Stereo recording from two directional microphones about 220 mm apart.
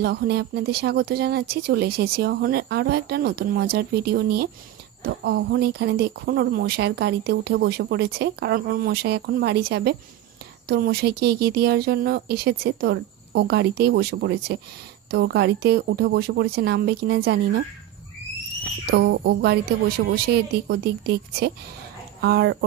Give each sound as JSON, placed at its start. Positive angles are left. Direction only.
{"t": 0.0, "sound": "speech", "side_deg": -45}
{"t": 18.9, "sound": "speech", "side_deg": -45}